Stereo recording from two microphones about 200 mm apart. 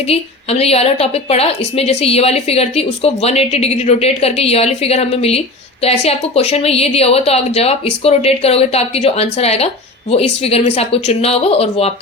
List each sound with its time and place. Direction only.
0.1 s a woman's voice: 30° left (ahead or behind)